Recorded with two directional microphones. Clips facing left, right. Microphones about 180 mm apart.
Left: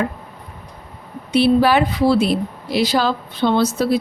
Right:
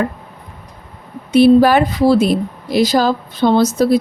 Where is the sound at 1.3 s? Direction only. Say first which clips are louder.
Right 5 dB; 45° right (ahead or behind).